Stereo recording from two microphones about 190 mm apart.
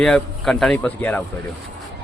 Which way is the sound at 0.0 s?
5° left (ahead or behind).